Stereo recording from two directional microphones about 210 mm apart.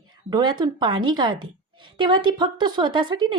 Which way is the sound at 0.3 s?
20° right (ahead or behind).